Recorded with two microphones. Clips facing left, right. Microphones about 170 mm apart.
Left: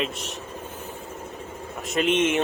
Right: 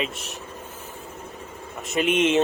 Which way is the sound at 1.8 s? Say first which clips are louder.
Even; 5° right (ahead or behind).